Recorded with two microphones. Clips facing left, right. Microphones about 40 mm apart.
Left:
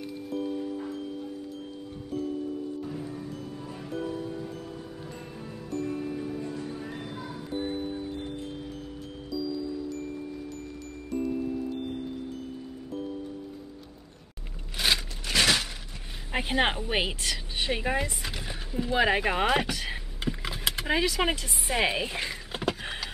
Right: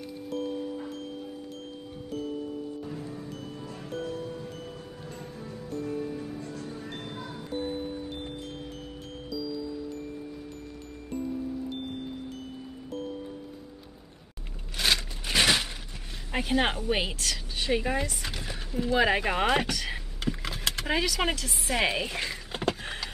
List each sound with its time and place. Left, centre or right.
2.8 s music: centre
7.1 s music: centre
14.8 s scrape: centre
15.2 s a sound: centre
16.3 s a woman's voice: centre
19.9 s vehicle: centre